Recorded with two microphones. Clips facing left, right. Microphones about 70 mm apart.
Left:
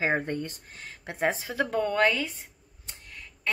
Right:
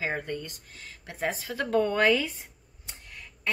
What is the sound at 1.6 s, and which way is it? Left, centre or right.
Speech, centre.